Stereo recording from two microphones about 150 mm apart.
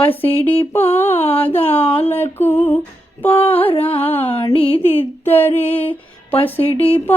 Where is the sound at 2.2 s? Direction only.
15° left (ahead or behind).